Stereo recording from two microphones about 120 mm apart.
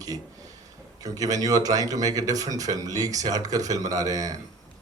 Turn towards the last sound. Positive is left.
turn(degrees=-30)  # may be behind; listen again after turning